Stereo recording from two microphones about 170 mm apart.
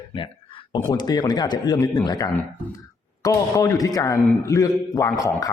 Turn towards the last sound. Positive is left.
turn(degrees=20)  # may be behind; listen again after turning